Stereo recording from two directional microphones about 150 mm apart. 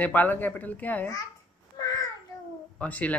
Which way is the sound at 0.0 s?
10° left (ahead or behind).